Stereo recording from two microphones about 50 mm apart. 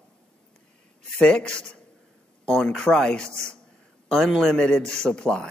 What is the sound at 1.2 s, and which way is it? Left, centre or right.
Speech, left.